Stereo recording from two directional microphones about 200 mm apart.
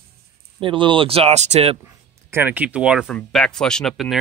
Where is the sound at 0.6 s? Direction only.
25° right (ahead or behind).